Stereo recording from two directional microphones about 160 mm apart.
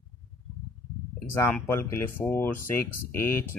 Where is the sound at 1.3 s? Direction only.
15° left (ahead or behind).